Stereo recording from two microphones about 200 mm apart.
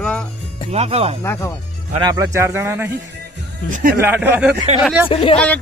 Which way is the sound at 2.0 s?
15° right (ahead or behind).